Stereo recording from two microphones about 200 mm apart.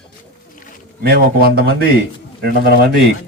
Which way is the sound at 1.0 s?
50° right (ahead or behind).